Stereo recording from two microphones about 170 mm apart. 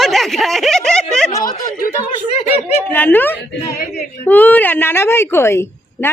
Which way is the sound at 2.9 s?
10° left (ahead or behind).